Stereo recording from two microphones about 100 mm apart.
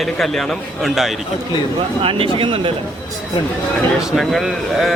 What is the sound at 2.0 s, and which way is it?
Speech, 65° right (ahead or behind).